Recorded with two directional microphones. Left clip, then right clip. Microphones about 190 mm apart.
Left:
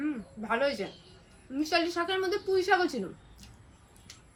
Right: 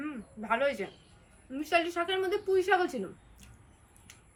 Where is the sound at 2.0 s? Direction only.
Centre (ahead or behind).